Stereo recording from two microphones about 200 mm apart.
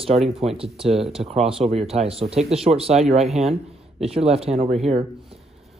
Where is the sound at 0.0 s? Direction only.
30° right (ahead or behind).